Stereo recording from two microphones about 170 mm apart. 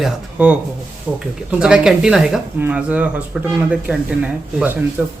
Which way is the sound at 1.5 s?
5° right (ahead or behind).